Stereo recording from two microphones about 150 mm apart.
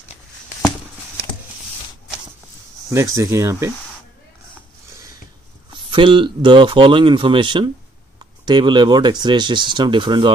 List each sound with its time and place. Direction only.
2.9 s speech: 20° right (ahead or behind)
5.9 s speech: 35° right (ahead or behind)